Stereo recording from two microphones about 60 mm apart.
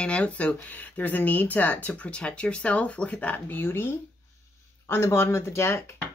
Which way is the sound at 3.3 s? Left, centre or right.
Left.